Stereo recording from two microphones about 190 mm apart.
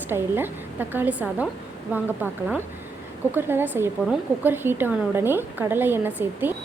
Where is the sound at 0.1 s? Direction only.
10° right (ahead or behind).